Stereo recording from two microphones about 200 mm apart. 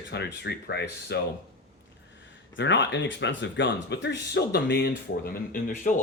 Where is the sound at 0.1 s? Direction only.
55° left (ahead or behind).